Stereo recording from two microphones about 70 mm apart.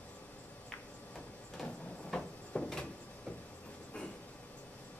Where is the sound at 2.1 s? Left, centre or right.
Centre.